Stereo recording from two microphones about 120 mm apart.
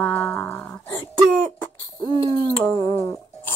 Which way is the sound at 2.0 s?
40° left (ahead or behind).